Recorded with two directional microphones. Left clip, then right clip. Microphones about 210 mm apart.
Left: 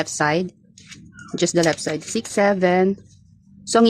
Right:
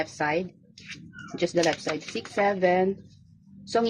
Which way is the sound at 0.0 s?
45° left (ahead or behind).